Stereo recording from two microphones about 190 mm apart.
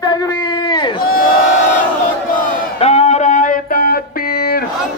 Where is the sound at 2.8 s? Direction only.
35° left (ahead or behind); by 4.6 s 55° left (ahead or behind).